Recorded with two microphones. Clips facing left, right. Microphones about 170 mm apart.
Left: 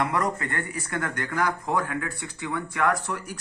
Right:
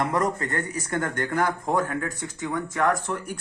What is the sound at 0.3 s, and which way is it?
Speech, 40° right (ahead or behind).